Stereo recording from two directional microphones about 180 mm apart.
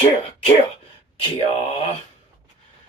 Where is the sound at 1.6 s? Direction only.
35° left (ahead or behind).